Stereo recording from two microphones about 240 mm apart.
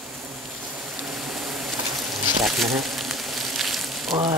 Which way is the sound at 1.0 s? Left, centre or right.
Centre.